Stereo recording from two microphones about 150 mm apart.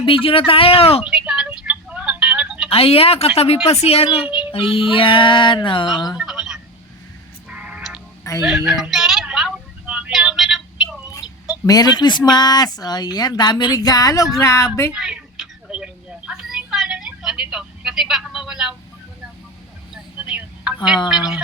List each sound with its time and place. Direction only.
0.0 s speech: 35° left (ahead or behind)
1.1 s telephone: 5° right (ahead or behind)
2.6 s speech: 40° left (ahead or behind)
4.3 s a sound: 5° right (ahead or behind)
4.5 s speech: 40° left (ahead or behind)
6.1 s telephone: 5° right (ahead or behind)
7.5 s music: 5° right (ahead or behind)
8.4 s a sound: centre (ahead or behind)
9.9 s synthetic singing: 5° right (ahead or behind)
11.6 s speech: 25° left (ahead or behind)
14.9 s a sound: 5° right (ahead or behind)
17.5 s vehicle: 5° right (ahead or behind)
19.9 s a sound: 10° right (ahead or behind)